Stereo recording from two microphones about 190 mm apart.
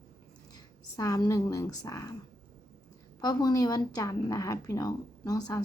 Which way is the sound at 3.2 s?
20° left (ahead or behind).